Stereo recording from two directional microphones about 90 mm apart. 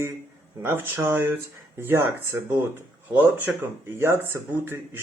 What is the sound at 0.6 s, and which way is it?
Speech, 30° right (ahead or behind).